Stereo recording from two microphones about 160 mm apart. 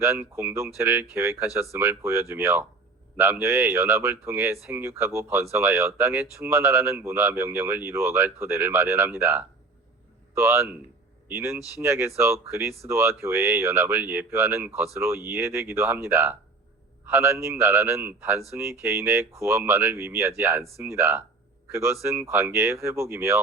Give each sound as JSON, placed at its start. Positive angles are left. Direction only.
{"t": 0.0, "sound": "a man's voice", "side_deg": -15}